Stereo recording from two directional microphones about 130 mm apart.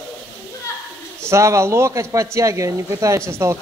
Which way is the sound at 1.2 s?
20° right (ahead or behind).